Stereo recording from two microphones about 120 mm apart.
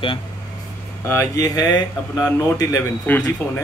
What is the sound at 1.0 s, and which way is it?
Speech, 20° left (ahead or behind).